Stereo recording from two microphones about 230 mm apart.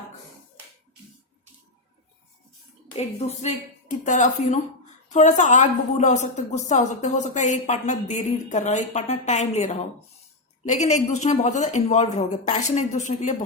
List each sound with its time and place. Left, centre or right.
2.9 s a woman's voice: left